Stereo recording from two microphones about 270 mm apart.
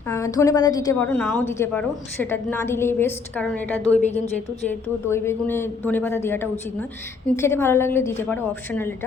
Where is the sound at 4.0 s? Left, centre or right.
Left.